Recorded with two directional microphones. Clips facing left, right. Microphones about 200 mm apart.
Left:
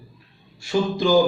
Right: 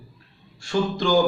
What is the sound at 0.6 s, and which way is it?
Speech, 10° left (ahead or behind).